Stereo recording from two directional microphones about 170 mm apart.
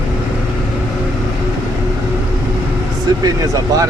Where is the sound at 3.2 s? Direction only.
20° right (ahead or behind).